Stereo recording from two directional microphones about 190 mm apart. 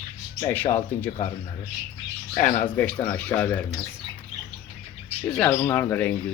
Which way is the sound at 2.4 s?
40° left (ahead or behind).